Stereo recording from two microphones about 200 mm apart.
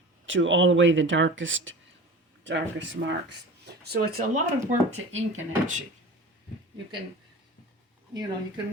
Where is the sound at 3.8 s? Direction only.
50° right (ahead or behind).